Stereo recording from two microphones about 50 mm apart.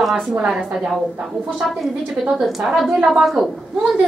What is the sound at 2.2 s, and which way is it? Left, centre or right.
A woman's voice, centre.